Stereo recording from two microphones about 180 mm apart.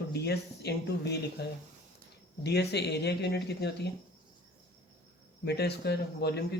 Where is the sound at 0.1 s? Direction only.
65° left (ahead or behind).